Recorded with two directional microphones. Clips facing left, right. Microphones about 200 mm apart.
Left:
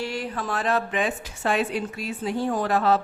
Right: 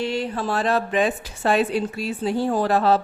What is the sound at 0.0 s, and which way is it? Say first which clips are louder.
A woman's voice: right 5 dB; 25° right (ahead or behind).